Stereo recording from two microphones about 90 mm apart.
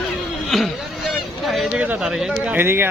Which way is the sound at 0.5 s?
Centre (ahead or behind).